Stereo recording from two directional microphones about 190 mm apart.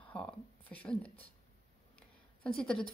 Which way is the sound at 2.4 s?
5° left (ahead or behind).